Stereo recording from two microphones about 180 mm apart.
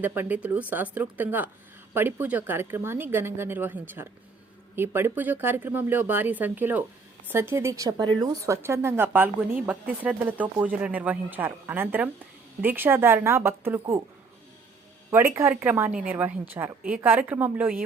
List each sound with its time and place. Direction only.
0.0 s a woman's voice: 10° right (ahead or behind)
15.1 s a woman's voice: 15° right (ahead or behind)